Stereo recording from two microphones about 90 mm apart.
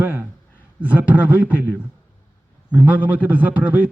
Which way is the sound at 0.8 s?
15° right (ahead or behind).